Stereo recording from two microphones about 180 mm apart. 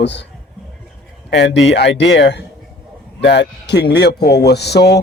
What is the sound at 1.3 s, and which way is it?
Speech, 80° left.